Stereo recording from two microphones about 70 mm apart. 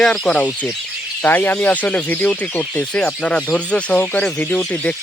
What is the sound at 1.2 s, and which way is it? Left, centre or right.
Speech, left.